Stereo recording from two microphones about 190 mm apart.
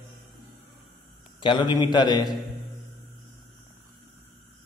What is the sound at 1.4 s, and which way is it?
Speech, 25° left (ahead or behind).